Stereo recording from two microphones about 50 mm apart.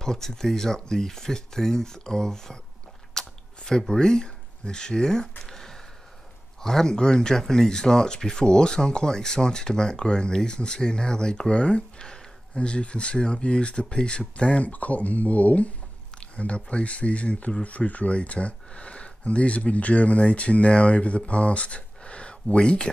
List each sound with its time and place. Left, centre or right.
0.0 s speech: centre
5.4 s a sound: centre
6.6 s speech: centre